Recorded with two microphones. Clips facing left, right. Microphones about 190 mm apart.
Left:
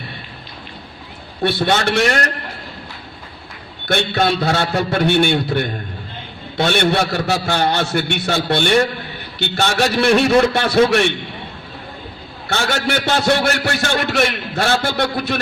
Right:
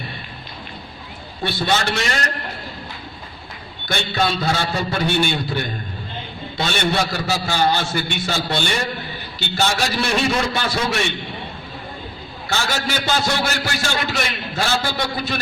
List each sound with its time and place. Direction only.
1.4 s a man's voice: 65° left (ahead or behind)
3.8 s a man's voice: 60° left (ahead or behind)
12.5 s a man's voice: 60° left (ahead or behind)